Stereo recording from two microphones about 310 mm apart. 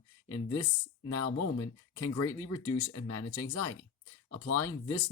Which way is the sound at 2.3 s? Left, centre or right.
Centre.